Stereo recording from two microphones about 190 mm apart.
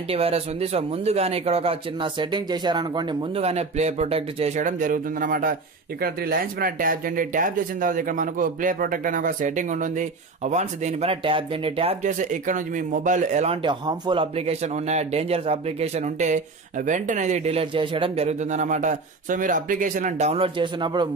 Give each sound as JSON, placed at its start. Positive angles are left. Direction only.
{"t": 0.1, "sound": "speech", "side_deg": -30}